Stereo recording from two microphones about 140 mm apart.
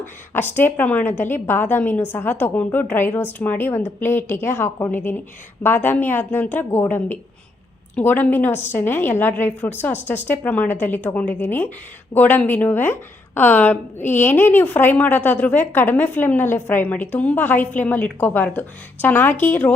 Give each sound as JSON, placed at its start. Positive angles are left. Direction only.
{"t": 0.3, "sound": "a woman's voice", "side_deg": 15}